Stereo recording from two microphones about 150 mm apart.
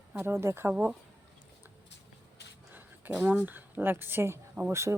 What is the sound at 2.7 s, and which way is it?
A woman's voice, 10° right (ahead or behind).